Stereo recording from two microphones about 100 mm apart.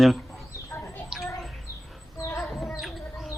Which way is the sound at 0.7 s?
25° left (ahead or behind).